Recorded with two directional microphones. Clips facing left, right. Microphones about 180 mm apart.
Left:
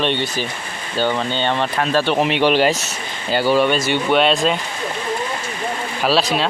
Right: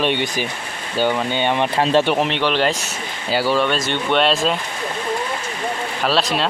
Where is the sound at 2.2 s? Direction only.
10° left (ahead or behind).